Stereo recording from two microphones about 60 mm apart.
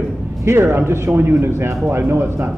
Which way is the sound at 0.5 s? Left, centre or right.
Right.